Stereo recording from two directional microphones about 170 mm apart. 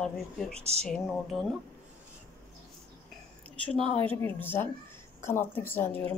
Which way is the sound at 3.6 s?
35° left (ahead or behind).